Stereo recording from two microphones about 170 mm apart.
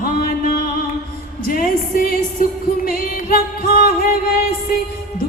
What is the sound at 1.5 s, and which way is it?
Music, 55° left (ahead or behind).